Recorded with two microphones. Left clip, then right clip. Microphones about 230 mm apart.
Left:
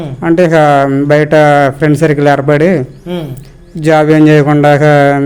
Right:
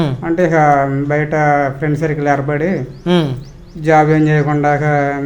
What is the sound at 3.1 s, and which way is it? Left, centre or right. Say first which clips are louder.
Speech: right 5 dB; right.